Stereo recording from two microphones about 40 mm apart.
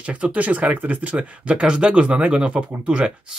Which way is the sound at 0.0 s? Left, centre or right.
Right.